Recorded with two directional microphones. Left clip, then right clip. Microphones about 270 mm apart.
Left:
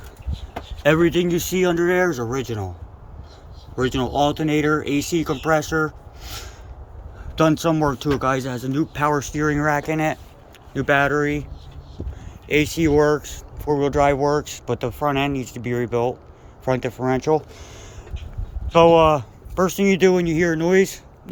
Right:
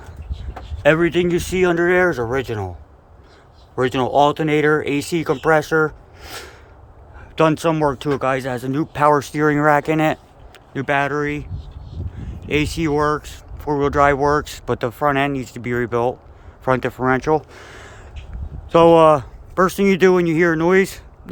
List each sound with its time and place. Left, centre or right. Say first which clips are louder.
0.8 s speech: right 2 dB; centre
3.8 s speech: right 5 dB; centre
10.8 s speech: left 1 dB; centre